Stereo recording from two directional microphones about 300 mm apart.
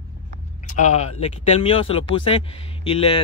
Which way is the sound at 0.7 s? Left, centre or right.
Left.